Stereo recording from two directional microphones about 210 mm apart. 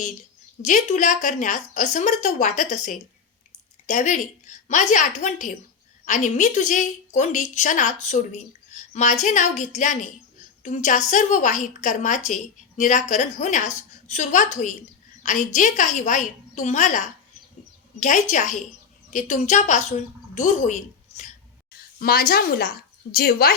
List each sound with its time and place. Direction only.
0.6 s a woman's voice: 35° left (ahead or behind)
18.0 s a woman's voice: 35° left (ahead or behind)
21.9 s a woman's voice: 45° left (ahead or behind)